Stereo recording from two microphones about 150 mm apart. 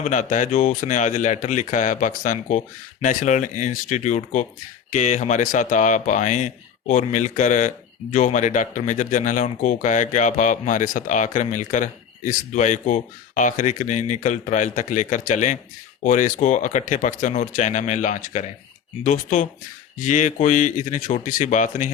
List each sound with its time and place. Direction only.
0.0 s speech: 55° left (ahead or behind)